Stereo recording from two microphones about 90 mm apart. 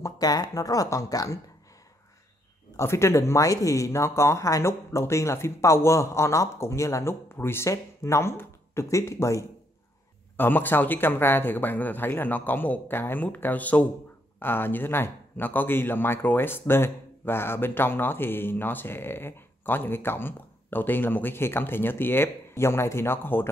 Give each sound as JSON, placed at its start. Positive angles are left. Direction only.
{"t": 0.0, "sound": "speech", "side_deg": 45}
{"t": 2.8, "sound": "speech", "side_deg": 30}
{"t": 10.3, "sound": "a man's voice", "side_deg": 20}